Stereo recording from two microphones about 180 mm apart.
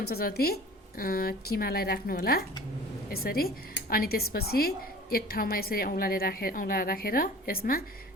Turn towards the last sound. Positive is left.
turn(degrees=55)  # may be behind; listen again after turning